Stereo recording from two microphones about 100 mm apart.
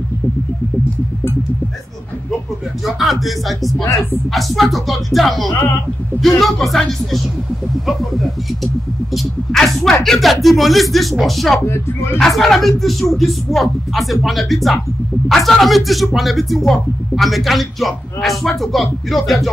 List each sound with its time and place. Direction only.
2.8 s speech: centre (ahead or behind)
9.1 s speech: 5° left (ahead or behind)
11.6 s speech: 25° left (ahead or behind)
12.2 s speech: centre (ahead or behind)